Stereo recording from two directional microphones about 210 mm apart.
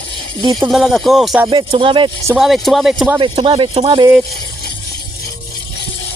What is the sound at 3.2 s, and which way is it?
Speech, 25° right (ahead or behind).